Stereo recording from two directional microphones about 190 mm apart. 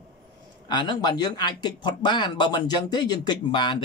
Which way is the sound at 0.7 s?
25° left (ahead or behind).